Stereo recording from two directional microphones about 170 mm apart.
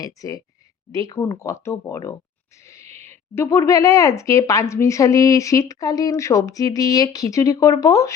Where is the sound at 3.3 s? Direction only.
15° left (ahead or behind).